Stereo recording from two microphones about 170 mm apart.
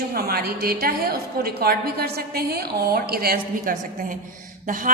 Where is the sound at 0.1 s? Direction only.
65° right (ahead or behind).